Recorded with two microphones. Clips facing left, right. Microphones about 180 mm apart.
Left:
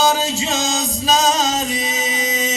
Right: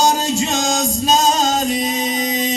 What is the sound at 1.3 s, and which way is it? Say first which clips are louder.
Music: right 2 dB; 45° right (ahead or behind).